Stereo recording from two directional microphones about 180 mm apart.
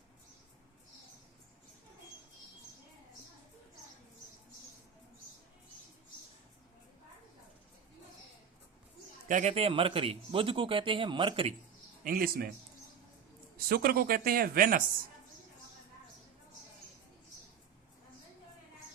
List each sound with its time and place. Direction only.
9.3 s a man's voice: 40° right (ahead or behind)
12.0 s speech: 55° right (ahead or behind)
13.7 s speech: 55° right (ahead or behind)